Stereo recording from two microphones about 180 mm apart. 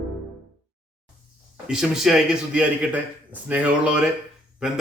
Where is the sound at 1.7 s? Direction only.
5° right (ahead or behind).